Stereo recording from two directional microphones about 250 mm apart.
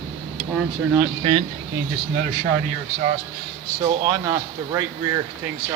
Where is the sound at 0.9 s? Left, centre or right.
Centre.